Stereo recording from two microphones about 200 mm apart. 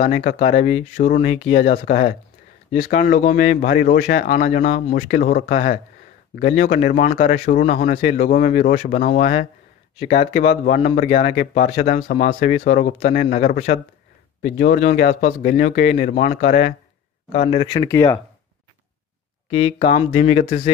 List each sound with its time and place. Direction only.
0.0 s speech: 45° left (ahead or behind)
17.5 s speech: 25° left (ahead or behind)
17.8 s speech: 15° left (ahead or behind)
20.1 s speech: 35° left (ahead or behind)